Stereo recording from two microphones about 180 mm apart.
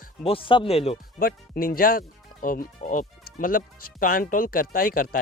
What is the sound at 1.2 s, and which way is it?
Speech, 55° left (ahead or behind).